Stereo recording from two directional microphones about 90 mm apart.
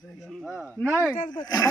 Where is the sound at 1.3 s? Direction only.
50° left (ahead or behind).